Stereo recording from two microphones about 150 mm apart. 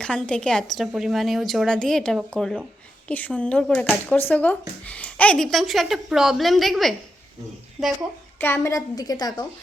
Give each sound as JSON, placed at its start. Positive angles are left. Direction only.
{"t": 0.0, "sound": "a woman's voice", "side_deg": 5}
{"t": 8.4, "sound": "a woman's voice", "side_deg": 15}